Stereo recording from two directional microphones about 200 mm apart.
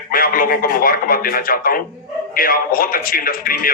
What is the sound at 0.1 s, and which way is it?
A man's voice, 45° left (ahead or behind).